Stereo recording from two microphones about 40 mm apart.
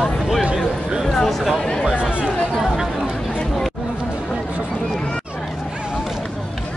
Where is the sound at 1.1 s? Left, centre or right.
Centre.